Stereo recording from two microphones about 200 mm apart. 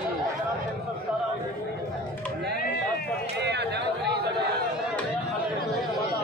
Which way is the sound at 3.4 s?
55° right (ahead or behind).